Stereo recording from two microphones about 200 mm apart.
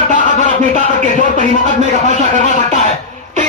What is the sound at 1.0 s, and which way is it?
A man's voice, 40° right (ahead or behind).